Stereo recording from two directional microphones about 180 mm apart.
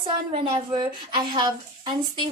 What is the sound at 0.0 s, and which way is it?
A woman's voice, 30° right (ahead or behind).